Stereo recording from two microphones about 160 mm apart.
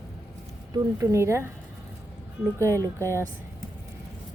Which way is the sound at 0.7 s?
20° right (ahead or behind).